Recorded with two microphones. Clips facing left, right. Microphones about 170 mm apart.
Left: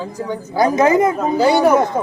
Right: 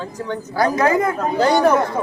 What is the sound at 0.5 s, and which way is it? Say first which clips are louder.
Speech: left 4 dB; 20° left (ahead or behind).